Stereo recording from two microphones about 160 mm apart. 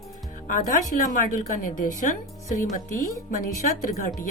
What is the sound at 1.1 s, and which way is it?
A woman's voice, 55° left (ahead or behind).